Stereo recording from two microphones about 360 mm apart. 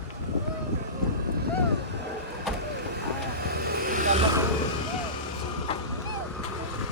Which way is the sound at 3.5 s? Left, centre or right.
Right.